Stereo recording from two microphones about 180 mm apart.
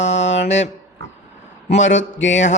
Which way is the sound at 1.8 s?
90° left.